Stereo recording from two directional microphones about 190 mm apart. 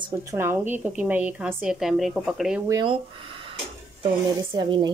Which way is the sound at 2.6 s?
20° right (ahead or behind).